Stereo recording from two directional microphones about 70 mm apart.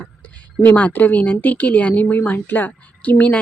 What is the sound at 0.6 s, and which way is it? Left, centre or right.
Speech, left.